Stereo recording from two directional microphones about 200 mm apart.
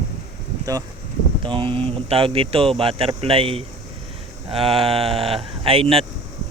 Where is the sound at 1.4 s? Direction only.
25° right (ahead or behind).